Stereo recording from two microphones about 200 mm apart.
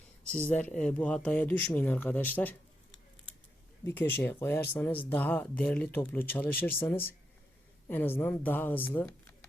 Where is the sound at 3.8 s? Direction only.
10° left (ahead or behind).